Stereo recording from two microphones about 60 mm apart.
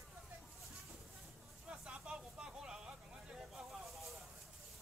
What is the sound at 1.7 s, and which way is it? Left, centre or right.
Vehicle, centre.